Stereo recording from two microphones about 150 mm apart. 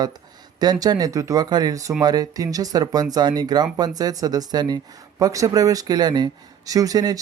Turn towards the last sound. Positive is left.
turn(degrees=-25)  # may be behind; listen again after turning